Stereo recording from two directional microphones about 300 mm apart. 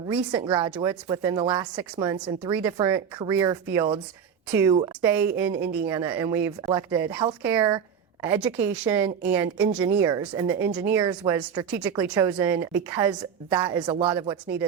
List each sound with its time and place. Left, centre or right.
0.1 s speech: centre